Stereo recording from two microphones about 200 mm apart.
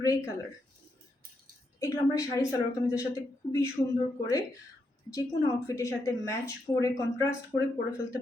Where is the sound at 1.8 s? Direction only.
15° left (ahead or behind).